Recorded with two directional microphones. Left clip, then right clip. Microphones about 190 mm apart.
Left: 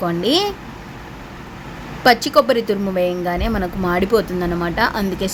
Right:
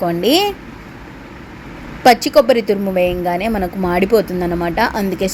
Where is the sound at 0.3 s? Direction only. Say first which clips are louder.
Right 4 dB; 15° right (ahead or behind).